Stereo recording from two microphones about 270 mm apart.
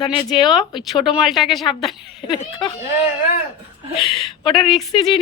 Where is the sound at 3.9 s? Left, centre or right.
Centre.